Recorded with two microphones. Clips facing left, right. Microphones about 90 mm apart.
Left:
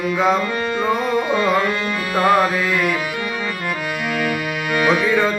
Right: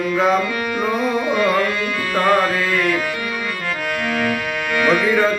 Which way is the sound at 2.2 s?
10° left (ahead or behind).